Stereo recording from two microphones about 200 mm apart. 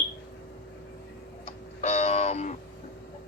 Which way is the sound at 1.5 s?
35° left (ahead or behind).